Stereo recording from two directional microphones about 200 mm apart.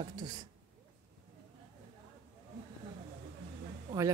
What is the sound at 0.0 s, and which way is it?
Speech, 20° right (ahead or behind).